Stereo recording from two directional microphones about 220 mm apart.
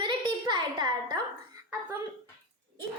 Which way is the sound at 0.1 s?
20° right (ahead or behind).